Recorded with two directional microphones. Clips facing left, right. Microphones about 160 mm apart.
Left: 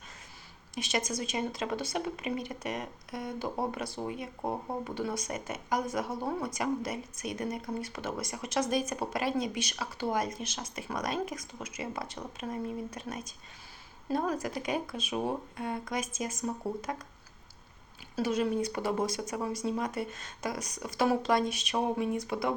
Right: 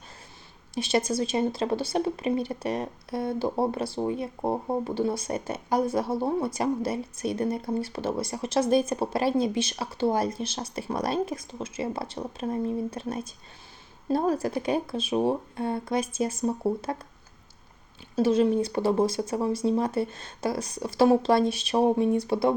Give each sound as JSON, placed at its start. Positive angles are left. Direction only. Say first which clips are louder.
{"t": 0.7, "sound": "speech", "louder": "right 8 dB", "side_deg": -30}
{"t": 18.2, "sound": "speech", "louder": "right 7 dB", "side_deg": -30}